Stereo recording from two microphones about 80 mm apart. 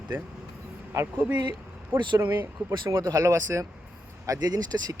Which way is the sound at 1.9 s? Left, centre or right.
Right.